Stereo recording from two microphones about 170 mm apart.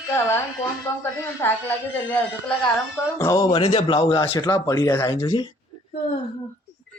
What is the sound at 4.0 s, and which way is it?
A man's voice, 20° left (ahead or behind).